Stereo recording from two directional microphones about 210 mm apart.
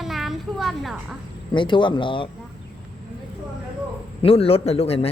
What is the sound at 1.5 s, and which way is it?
Speech, 25° left (ahead or behind).